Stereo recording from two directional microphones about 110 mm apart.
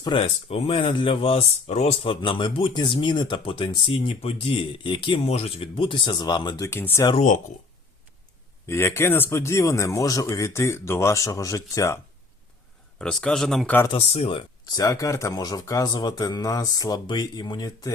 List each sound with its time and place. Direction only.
0.2 s speech: 60° left (ahead or behind); by 6.6 s 40° left (ahead or behind)
6.6 s speech: 20° left (ahead or behind)
8.6 s speech: 25° left (ahead or behind)
13.0 s speech: 10° left (ahead or behind)
13.9 s speech: 60° left (ahead or behind)
14.8 s speech: 30° left (ahead or behind)